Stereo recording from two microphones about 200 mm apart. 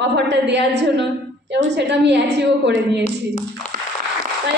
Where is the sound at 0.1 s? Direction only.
60° right (ahead or behind).